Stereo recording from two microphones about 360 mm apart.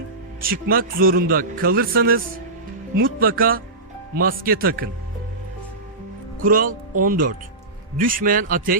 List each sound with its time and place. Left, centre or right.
0.4 s speech: right
6.4 s speech: right